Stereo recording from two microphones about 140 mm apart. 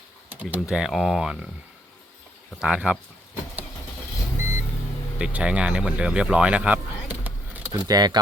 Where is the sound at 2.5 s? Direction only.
10° right (ahead or behind).